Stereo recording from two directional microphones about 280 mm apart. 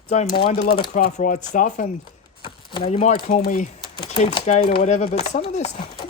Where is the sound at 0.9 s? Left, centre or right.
Left.